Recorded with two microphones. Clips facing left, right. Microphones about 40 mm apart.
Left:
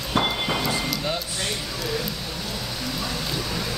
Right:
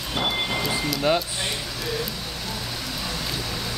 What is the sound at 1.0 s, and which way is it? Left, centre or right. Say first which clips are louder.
Speech: right 5 dB; right.